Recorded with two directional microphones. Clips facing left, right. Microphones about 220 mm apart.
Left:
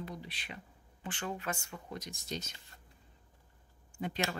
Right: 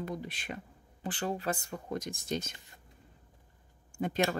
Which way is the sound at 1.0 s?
35° right (ahead or behind).